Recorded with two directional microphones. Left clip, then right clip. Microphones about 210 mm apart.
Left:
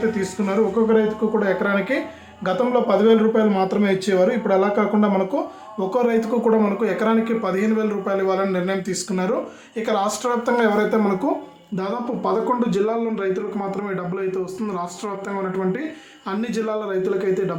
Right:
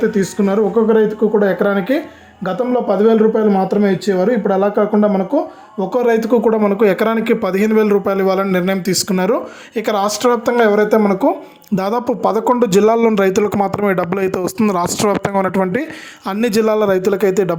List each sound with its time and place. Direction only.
0.2 s speech: 35° right (ahead or behind)
11.7 s speech: 45° right (ahead or behind)